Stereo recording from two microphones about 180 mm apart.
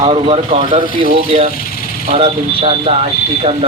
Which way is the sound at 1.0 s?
45° right (ahead or behind).